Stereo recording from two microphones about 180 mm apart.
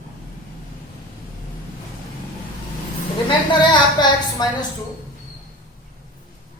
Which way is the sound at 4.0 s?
25° left (ahead or behind).